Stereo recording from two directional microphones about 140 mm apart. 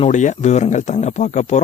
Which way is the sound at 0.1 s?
60° left (ahead or behind).